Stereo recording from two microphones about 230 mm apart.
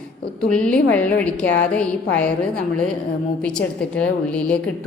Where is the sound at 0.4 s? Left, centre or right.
Centre.